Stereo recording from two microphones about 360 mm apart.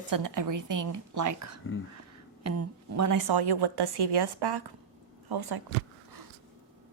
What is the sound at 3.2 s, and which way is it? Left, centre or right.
A woman's voice, right.